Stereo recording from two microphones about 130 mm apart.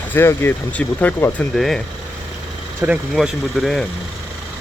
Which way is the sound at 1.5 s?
5° left (ahead or behind).